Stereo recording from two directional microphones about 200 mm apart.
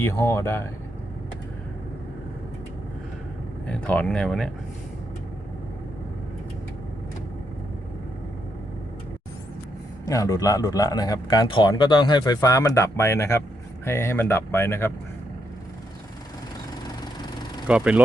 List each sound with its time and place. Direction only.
0.0 s speech: 10° left (ahead or behind)
3.7 s speech: 5° left (ahead or behind)
10.1 s speech: 15° left (ahead or behind)
17.7 s speech: 5° right (ahead or behind)